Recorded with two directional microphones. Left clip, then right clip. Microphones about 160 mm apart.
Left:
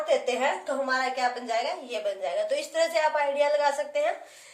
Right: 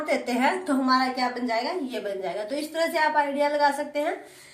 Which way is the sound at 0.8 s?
15° left (ahead or behind).